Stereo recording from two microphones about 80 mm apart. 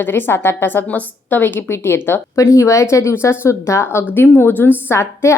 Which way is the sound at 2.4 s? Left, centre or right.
Left.